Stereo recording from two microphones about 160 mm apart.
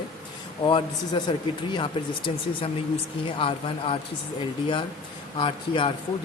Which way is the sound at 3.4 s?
35° left (ahead or behind).